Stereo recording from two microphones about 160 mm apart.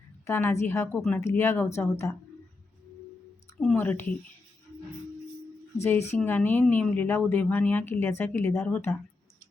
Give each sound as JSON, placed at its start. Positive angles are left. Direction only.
{"t": 0.3, "sound": "a woman's voice", "side_deg": 15}
{"t": 3.8, "sound": "a woman's voice", "side_deg": 10}
{"t": 5.8, "sound": "a woman's voice", "side_deg": 15}